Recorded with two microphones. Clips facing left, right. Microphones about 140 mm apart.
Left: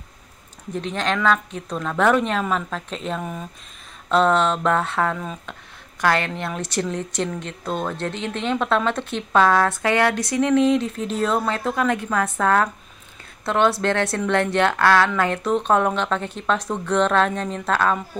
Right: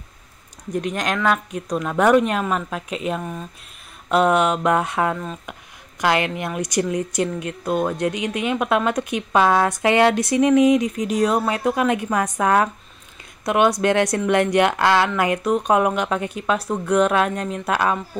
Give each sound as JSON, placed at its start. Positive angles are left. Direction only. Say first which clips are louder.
{"t": 0.7, "sound": "a woman's voice", "louder": "right 1 dB", "side_deg": -10}